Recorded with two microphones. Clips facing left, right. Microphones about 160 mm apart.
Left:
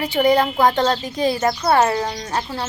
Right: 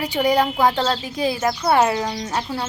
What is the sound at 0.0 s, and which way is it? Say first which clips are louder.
A woman's voice: left 2 dB; 10° right (ahead or behind).